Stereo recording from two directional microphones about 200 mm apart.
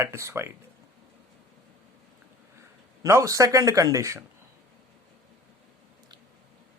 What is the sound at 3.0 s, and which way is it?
Speech, 15° right (ahead or behind).